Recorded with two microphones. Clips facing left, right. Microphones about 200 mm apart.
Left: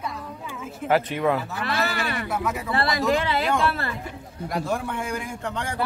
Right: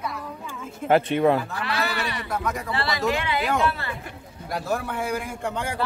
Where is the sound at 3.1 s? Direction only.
35° left (ahead or behind).